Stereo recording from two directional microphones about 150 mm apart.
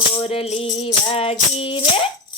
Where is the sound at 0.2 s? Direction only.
40° left (ahead or behind).